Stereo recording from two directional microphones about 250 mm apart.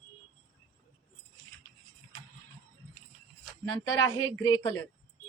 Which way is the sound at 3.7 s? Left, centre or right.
Centre.